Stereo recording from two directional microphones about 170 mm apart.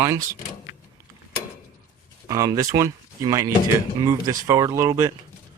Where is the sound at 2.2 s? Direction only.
20° right (ahead or behind).